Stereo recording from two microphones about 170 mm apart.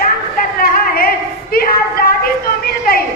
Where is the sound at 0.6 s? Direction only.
60° left (ahead or behind).